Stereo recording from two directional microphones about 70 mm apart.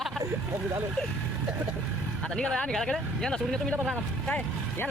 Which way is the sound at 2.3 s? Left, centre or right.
Centre.